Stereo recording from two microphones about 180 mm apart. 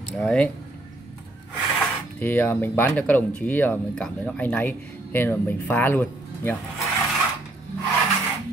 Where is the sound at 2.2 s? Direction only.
10° left (ahead or behind).